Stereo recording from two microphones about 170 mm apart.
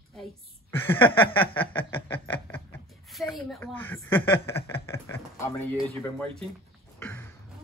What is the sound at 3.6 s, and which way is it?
Speech, 10° left (ahead or behind).